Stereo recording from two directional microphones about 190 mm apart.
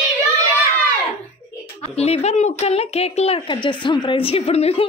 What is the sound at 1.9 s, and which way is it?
A woman's voice, 35° left (ahead or behind).